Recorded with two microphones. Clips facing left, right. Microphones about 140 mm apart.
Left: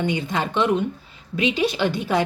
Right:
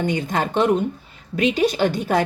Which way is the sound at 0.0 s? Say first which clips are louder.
Right 2 dB; 45° right (ahead or behind).